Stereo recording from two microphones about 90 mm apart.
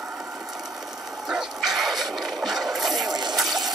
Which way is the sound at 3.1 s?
55° right (ahead or behind).